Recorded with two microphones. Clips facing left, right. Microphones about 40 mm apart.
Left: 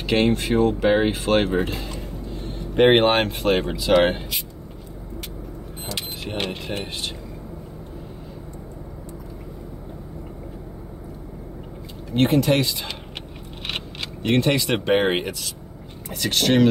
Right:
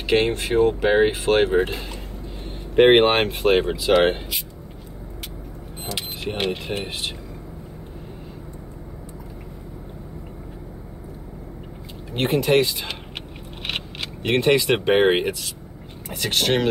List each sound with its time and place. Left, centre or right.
0.0 s speech: centre
2.7 s speech: centre
5.9 s keys jangling: centre
6.5 s speech: centre
12.1 s speech: centre